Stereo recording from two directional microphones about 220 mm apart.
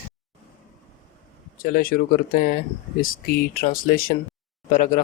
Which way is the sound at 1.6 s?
40° left (ahead or behind).